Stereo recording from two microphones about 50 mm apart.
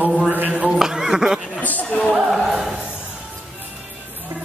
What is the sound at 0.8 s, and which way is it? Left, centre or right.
Speech, centre.